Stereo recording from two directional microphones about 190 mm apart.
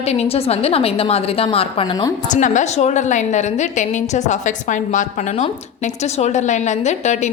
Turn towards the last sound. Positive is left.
turn(degrees=40)  # may be behind; listen again after turning